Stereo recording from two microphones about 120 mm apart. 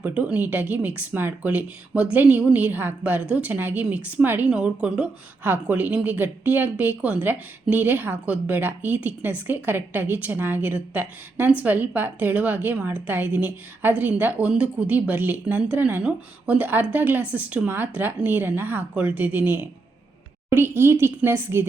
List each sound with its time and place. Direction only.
0.0 s a woman's voice: 10° right (ahead or behind)